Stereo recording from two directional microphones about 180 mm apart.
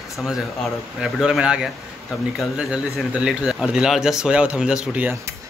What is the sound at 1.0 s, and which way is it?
A man's voice, 5° right (ahead or behind).